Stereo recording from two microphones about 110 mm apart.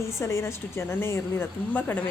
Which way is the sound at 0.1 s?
25° left (ahead or behind).